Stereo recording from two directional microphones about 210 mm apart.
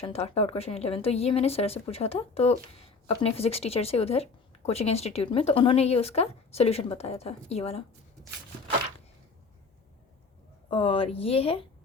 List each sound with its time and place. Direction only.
0.0 s a woman's voice: 30° left (ahead or behind)
10.7 s a woman's voice: 25° left (ahead or behind)